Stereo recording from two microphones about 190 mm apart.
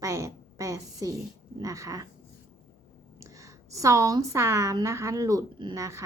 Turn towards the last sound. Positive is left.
turn(degrees=-15)  # may be behind; listen again after turning